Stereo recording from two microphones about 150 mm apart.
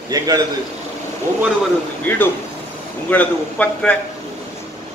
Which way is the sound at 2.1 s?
15° left (ahead or behind).